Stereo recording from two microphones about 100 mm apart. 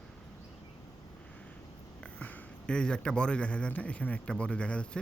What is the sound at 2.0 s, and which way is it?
Speech, 10° left (ahead or behind).